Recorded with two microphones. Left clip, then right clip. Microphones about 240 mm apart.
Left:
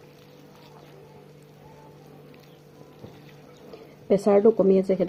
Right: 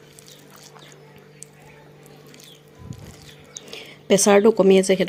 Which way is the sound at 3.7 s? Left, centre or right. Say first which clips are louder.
Right 4 dB; right.